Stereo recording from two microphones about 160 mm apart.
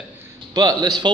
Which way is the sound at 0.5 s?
25° right (ahead or behind).